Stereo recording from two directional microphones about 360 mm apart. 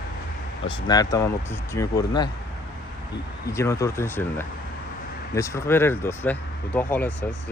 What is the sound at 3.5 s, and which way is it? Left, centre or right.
Speech, centre.